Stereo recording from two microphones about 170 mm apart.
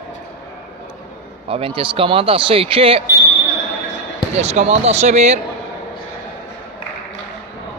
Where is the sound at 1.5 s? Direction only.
30° right (ahead or behind).